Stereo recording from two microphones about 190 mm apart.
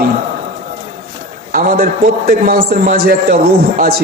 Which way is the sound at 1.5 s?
45° right (ahead or behind).